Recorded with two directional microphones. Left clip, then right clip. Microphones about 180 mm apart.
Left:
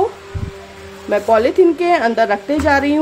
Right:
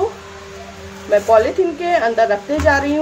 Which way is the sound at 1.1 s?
60° left (ahead or behind).